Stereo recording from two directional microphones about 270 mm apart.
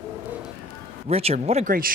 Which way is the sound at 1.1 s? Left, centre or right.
Right.